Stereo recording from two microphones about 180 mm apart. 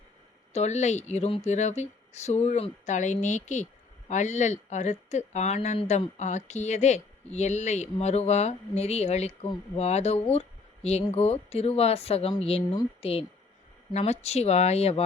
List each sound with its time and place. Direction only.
0.5 s speech: 40° left (ahead or behind)